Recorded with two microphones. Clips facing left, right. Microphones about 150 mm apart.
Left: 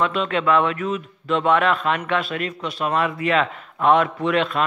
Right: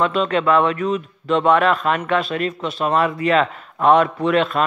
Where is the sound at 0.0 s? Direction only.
40° right (ahead or behind).